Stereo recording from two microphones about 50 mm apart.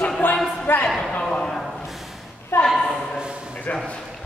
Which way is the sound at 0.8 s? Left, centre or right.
Centre.